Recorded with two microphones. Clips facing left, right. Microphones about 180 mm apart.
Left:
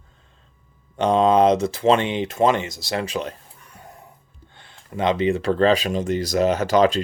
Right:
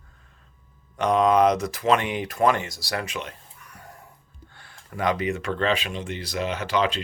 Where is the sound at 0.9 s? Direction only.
30° left (ahead or behind).